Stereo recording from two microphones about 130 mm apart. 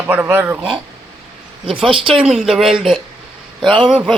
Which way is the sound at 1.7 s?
40° right (ahead or behind).